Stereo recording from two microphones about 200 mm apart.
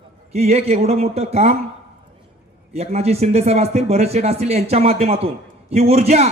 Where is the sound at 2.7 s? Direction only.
30° right (ahead or behind).